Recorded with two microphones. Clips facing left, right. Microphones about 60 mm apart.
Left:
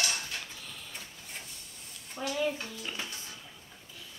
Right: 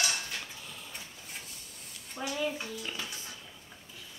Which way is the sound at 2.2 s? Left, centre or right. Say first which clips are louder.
Left 1 dB; centre.